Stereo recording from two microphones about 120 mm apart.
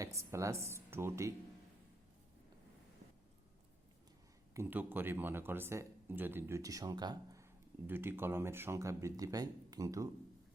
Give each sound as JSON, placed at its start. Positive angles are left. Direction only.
{"t": 0.0, "sound": "speech", "side_deg": -25}
{"t": 4.5, "sound": "speech", "side_deg": -15}
{"t": 7.9, "sound": "speech", "side_deg": -20}